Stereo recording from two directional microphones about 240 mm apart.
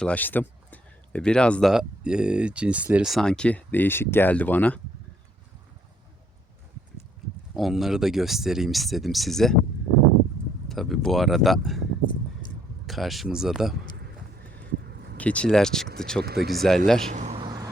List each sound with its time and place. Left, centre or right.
0.0 s speech: centre
7.5 s speech: centre
10.7 s speech: centre
12.8 s speech: centre
14.5 s vehicle: right
15.2 s speech: centre
16.2 s speech: right
16.5 s speech: centre
17.1 s a sound: right